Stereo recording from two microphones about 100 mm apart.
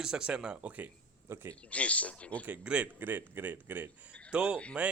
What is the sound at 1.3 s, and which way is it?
Speech, 25° right (ahead or behind).